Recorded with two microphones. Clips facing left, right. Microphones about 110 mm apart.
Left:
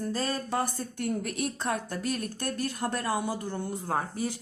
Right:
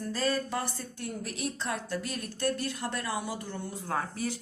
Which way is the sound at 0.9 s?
60° left (ahead or behind).